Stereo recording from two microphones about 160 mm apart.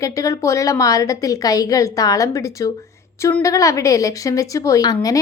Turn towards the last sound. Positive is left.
turn(degrees=25)  # may be behind; listen again after turning